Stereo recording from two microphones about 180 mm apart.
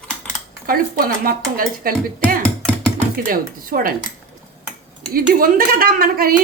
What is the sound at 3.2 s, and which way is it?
Speech, 50° right (ahead or behind).